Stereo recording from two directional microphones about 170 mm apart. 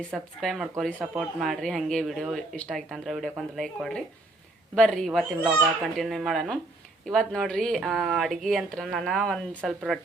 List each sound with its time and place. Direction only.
0.0 s speech: centre (ahead or behind)